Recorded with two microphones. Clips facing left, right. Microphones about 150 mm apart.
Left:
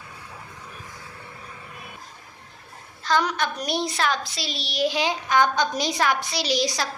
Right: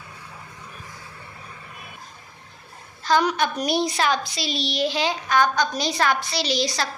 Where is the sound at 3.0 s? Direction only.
5° right (ahead or behind).